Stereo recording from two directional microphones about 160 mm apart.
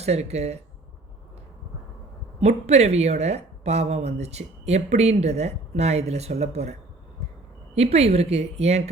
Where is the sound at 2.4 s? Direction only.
40° right (ahead or behind).